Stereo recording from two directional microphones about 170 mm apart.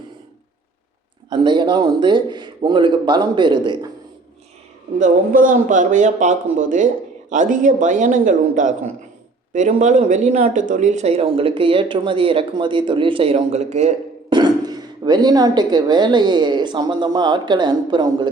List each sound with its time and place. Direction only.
1.3 s speech: 25° right (ahead or behind)
4.9 s speech: 50° right (ahead or behind)
14.3 s speech: 25° right (ahead or behind)